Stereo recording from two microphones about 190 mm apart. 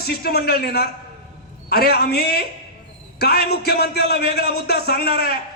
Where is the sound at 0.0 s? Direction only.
55° left (ahead or behind).